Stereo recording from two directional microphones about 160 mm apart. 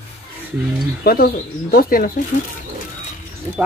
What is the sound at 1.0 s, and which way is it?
Speech, 70° left (ahead or behind).